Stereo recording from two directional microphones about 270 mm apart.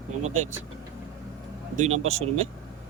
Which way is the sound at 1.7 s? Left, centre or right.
Right.